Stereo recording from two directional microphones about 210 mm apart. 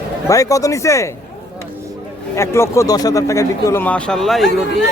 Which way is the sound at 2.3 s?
10° left (ahead or behind).